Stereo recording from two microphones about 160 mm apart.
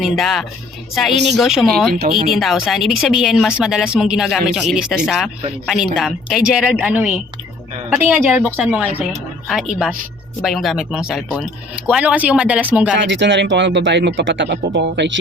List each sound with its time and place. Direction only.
0.0 s speech: centre (ahead or behind)
1.9 s speech: 75° right (ahead or behind)
2.3 s a woman's voice: centre (ahead or behind)
13.0 s speech: 90° right